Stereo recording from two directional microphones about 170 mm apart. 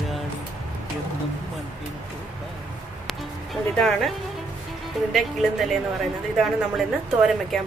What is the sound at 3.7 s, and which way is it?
Speech, centre (ahead or behind).